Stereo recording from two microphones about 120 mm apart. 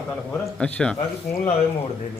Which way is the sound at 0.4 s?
10° left (ahead or behind).